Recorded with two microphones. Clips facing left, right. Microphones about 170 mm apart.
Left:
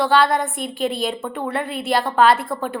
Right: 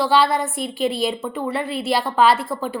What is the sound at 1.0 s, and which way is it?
A woman's voice, centre (ahead or behind).